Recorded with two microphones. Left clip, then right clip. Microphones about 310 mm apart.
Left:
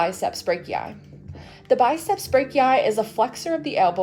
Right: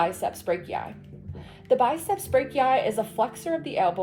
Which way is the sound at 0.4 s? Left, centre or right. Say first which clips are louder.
Left 4 dB; left.